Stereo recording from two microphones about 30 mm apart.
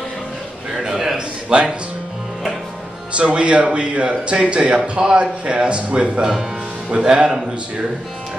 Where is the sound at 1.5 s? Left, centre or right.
Right.